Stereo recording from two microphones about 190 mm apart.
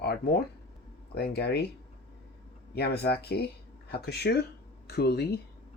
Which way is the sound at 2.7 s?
60° left (ahead or behind).